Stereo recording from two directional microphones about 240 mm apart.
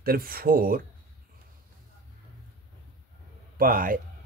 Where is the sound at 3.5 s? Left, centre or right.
Right.